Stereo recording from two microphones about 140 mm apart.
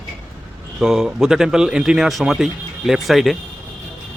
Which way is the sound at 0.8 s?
5° right (ahead or behind).